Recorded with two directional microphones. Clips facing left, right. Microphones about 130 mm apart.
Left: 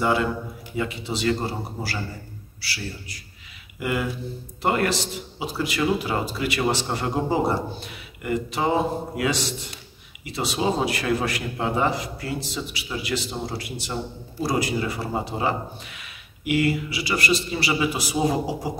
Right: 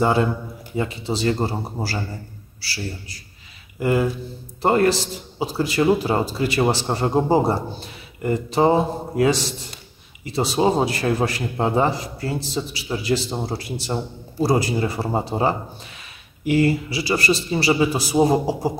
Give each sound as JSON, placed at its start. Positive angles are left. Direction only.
{"t": 0.0, "sound": "a man's voice", "side_deg": -30}